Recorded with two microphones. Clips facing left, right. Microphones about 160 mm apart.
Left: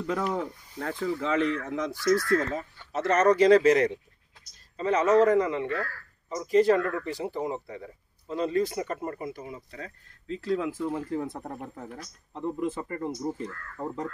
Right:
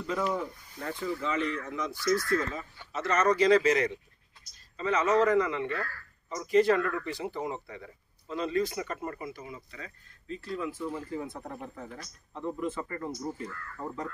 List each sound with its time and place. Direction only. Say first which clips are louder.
0.0 s speech: left 2 dB; 60° left (ahead or behind)
0.7 s speech: left 4 dB; 85° left
2.0 s a man's voice: left 4 dB; 70° left (ahead or behind); by 9.2 s 30° left (ahead or behind)
9.2 s a man's voice: left 4 dB; 40° left (ahead or behind)
10.2 s speech: left 6 dB; 90° left
11.0 s a man's voice: left 5 dB; 55° left (ahead or behind)
12.4 s speech: left 3 dB; 20° left (ahead or behind)